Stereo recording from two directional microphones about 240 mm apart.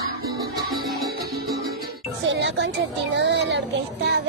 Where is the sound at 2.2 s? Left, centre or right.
Right.